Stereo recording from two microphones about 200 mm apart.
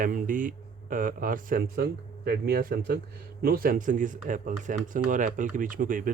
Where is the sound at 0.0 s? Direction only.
40° right (ahead or behind).